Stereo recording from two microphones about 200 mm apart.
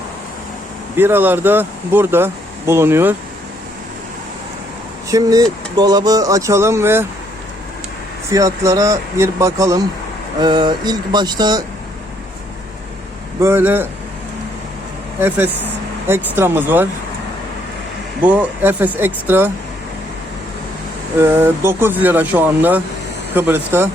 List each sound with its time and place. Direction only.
0.9 s speech: 10° right (ahead or behind)
5.0 s speech: 15° right (ahead or behind)
8.3 s speech: 15° right (ahead or behind)
10.4 s a sound: 20° right (ahead or behind)
13.4 s speech: 10° right (ahead or behind)
15.2 s speech: 10° right (ahead or behind)
18.2 s speech: 10° right (ahead or behind)
21.2 s speech: 10° right (ahead or behind)